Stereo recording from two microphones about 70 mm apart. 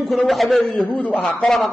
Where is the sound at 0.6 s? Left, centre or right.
Centre.